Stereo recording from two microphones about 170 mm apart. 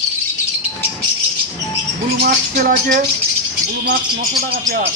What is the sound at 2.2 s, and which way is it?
Speech, 55° right (ahead or behind).